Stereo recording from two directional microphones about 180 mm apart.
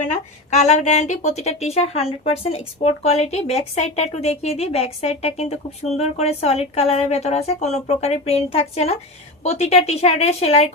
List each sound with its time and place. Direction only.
0.0 s a woman's voice: 40° left (ahead or behind)